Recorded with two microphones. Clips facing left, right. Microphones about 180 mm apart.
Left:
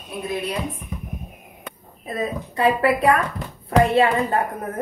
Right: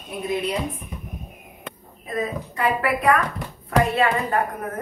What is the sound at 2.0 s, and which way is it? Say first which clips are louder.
A woman's voice: left 1 dB; 30° left (ahead or behind).